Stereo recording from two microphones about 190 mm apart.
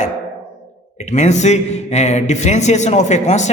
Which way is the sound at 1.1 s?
40° left (ahead or behind).